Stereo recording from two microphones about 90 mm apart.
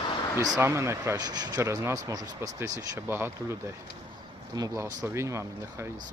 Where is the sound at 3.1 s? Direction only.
25° right (ahead or behind).